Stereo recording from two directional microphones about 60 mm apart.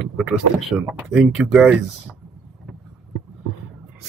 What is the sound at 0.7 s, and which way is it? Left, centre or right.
Speech, right.